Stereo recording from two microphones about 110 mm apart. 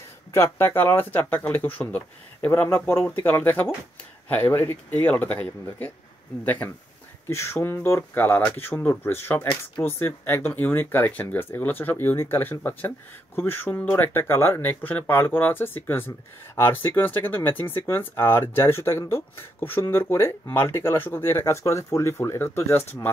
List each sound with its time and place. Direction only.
0.3 s speech: 20° left (ahead or behind)